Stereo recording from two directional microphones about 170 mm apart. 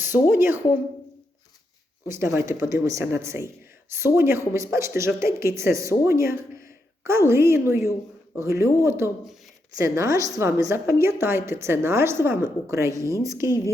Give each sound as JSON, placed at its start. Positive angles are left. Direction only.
{"t": 0.3, "sound": "speech", "side_deg": -15}
{"t": 2.0, "sound": "speech", "side_deg": -15}
{"t": 13.2, "sound": "a sound", "side_deg": -20}